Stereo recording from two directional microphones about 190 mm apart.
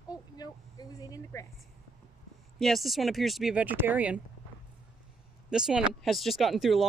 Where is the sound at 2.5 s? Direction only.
Centre (ahead or behind).